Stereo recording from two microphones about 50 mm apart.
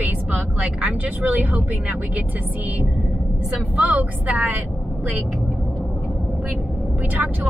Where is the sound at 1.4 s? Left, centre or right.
Right.